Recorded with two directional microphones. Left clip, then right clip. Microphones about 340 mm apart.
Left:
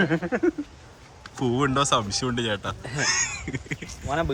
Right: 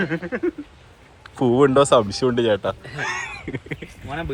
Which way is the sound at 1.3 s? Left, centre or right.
Centre.